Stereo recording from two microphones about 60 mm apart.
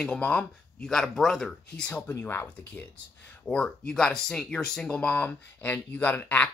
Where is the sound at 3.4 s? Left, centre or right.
Centre.